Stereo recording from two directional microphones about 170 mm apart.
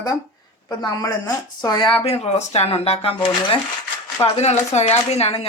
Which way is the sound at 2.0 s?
40° left (ahead or behind).